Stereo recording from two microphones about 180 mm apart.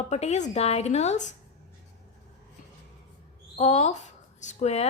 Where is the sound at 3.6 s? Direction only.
40° left (ahead or behind).